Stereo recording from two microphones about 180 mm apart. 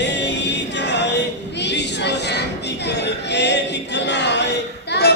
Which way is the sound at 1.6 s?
70° left (ahead or behind).